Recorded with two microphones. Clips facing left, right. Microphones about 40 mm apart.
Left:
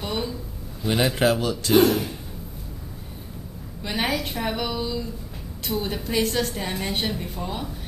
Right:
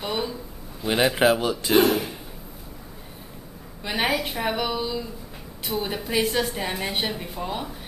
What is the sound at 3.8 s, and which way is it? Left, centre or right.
A woman's voice, centre.